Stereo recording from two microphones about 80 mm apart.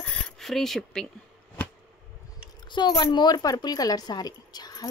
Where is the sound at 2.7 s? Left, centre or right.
Left.